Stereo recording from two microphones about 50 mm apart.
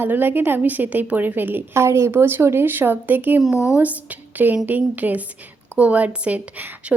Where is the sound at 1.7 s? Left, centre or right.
Right.